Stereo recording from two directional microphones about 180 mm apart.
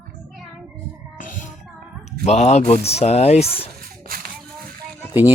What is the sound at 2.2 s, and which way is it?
Speech, 35° left (ahead or behind).